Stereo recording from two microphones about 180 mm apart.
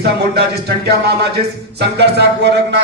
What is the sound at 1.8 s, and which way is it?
A man's voice, 70° right (ahead or behind).